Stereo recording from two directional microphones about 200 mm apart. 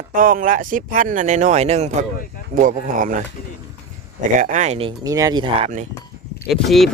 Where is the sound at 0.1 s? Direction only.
45° right (ahead or behind).